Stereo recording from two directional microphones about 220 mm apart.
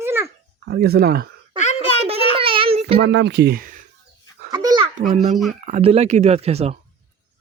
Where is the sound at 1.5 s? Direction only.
30° left (ahead or behind).